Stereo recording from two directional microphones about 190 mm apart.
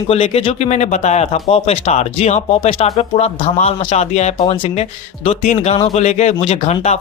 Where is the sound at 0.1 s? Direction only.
30° left (ahead or behind).